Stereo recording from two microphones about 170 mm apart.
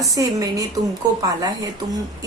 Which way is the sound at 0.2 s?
20° right (ahead or behind).